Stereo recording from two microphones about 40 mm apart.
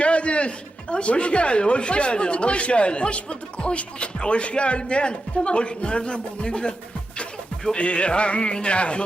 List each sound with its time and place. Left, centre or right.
0.0 s speech: left
7.2 s music: centre
7.8 s speech: left